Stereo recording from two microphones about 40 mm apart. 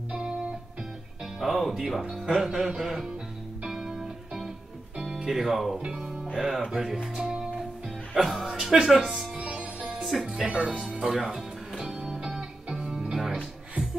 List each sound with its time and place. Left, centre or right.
1.2 s music: centre
1.9 s speech: centre
2.2 s music: centre
5.0 s speech: centre
5.8 s music: centre
6.3 s music: centre
8.1 s speech: centre
9.4 s music: right
10.0 s speech: centre
10.4 s speech: right
11.2 s music: centre